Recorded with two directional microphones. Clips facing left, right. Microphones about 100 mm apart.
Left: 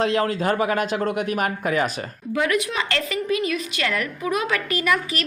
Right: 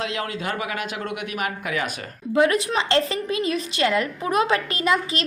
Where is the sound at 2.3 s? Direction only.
30° right (ahead or behind).